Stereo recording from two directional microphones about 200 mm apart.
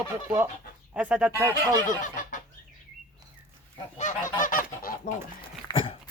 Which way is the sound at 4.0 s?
40° left (ahead or behind).